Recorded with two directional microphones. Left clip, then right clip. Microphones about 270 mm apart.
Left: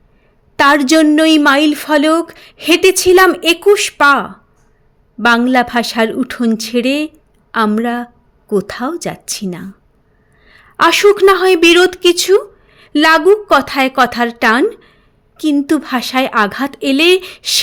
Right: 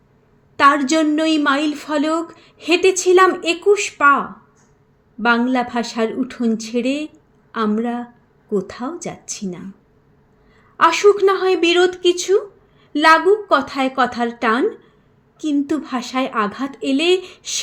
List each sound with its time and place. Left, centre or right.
0.5 s a woman's voice: left